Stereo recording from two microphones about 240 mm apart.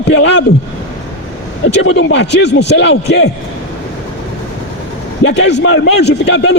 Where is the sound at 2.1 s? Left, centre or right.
Left.